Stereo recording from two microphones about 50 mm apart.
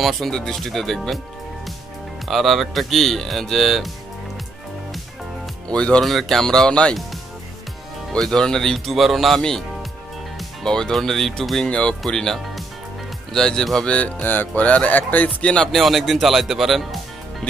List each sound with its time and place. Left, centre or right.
0.3 s speech: centre
2.2 s speech: centre
5.7 s speech: left
6.0 s speech: centre
8.2 s speech: centre
10.6 s speech: centre
11.6 s speech: centre
13.8 s speech: left
14.2 s music: left
15.4 s speech: centre
15.7 s speech: centre